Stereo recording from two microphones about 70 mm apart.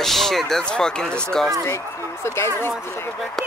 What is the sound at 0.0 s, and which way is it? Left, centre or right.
Speech, centre.